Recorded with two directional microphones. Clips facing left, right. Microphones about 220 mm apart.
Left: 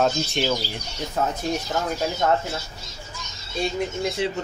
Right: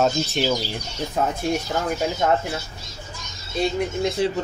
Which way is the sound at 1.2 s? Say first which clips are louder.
Right 1 dB; 15° right (ahead or behind).